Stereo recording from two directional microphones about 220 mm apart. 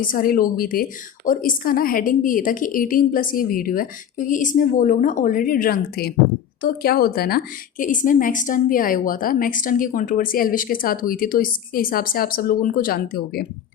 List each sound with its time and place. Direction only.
0.0 s a woman's voice: 40° left (ahead or behind)